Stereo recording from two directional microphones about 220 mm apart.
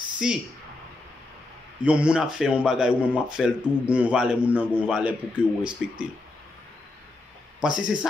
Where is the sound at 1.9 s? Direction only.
5° right (ahead or behind).